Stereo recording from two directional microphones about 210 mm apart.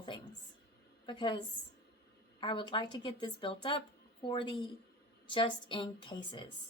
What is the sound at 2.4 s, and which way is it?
Speech, 25° left (ahead or behind).